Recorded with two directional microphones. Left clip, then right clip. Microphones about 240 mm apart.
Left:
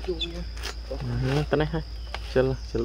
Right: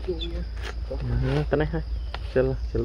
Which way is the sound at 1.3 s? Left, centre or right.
Centre.